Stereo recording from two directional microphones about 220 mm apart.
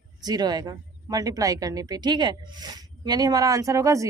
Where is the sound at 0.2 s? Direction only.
20° right (ahead or behind).